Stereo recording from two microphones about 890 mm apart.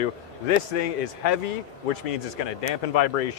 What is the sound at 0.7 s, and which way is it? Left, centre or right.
Speech, left.